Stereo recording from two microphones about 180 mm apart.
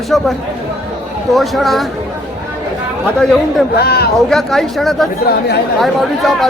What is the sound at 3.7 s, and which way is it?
Speech, 60° left (ahead or behind).